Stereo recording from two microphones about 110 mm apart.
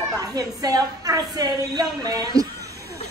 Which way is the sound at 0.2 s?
35° right (ahead or behind).